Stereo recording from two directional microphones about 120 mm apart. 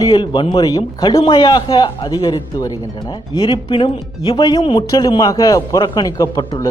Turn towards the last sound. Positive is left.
turn(degrees=30)  # may be behind; listen again after turning